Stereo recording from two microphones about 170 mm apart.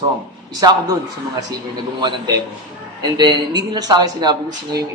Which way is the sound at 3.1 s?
25° right (ahead or behind).